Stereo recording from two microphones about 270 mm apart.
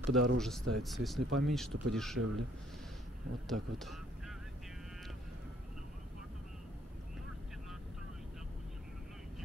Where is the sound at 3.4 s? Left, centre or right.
Centre.